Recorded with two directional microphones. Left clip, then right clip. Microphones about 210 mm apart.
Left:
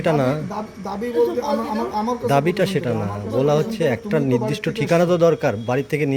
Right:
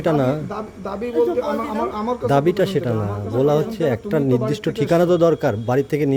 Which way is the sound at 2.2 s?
20° right (ahead or behind).